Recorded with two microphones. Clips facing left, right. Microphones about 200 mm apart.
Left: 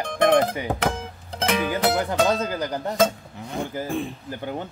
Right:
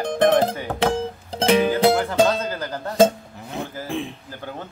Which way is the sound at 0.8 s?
30° right (ahead or behind).